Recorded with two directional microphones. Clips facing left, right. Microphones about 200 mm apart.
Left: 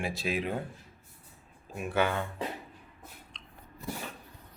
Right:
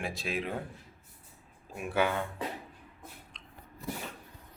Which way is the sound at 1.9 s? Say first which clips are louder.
Even; 10° right (ahead or behind).